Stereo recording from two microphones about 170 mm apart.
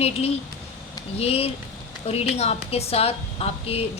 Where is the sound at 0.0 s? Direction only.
35° left (ahead or behind).